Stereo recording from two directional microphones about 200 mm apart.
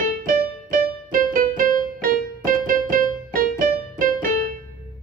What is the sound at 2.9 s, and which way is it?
Music, 45° right (ahead or behind).